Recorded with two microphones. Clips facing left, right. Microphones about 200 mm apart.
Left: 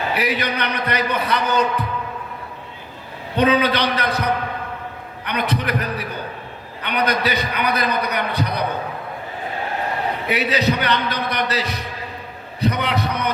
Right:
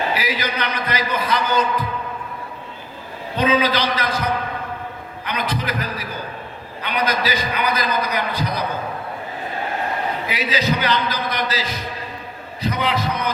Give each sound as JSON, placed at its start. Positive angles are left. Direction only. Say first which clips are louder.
{"t": 0.1, "sound": "a man's voice", "louder": "left 2 dB", "side_deg": 65}
{"t": 3.3, "sound": "a man's voice", "louder": "left 1 dB", "side_deg": 65}
{"t": 10.2, "sound": "a man's voice", "louder": "left 4 dB", "side_deg": 65}